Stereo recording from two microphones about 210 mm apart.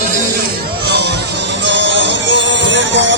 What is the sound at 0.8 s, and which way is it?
Music, 50° right (ahead or behind).